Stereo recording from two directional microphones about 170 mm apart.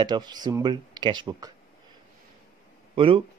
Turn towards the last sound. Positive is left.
turn(degrees=-30)  # may be behind; listen again after turning